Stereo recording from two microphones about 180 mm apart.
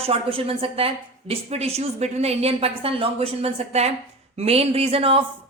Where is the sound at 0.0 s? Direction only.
30° right (ahead or behind).